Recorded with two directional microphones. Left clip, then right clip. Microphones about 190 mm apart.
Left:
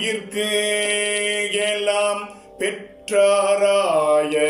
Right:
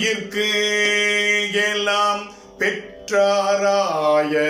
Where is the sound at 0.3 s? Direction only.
10° left (ahead or behind).